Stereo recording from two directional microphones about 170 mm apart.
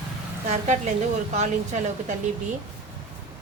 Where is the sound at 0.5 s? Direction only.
45° right (ahead or behind).